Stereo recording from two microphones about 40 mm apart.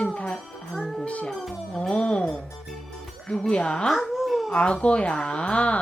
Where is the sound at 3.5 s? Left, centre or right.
Left.